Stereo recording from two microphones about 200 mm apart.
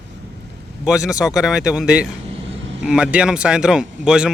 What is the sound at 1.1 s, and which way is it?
A man's voice, centre (ahead or behind).